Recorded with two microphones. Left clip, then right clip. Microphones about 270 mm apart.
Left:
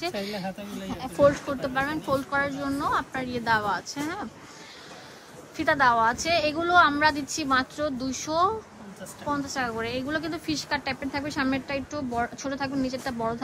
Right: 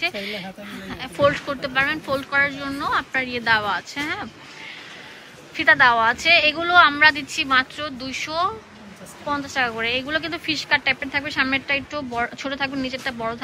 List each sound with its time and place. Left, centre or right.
0.0 s a woman's voice: centre
5.6 s a woman's voice: centre